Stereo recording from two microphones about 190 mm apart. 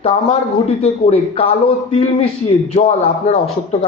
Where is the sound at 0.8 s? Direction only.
30° left (ahead or behind).